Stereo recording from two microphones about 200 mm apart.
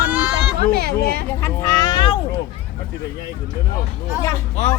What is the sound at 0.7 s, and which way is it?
Speech, 50° right (ahead or behind).